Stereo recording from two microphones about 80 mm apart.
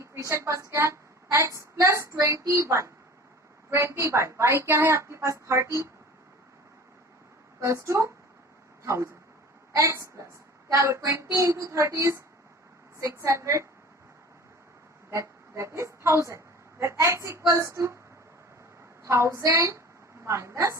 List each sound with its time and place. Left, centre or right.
0.0 s a woman's voice: right
7.6 s a woman's voice: right
15.1 s a woman's voice: right
19.0 s a woman's voice: right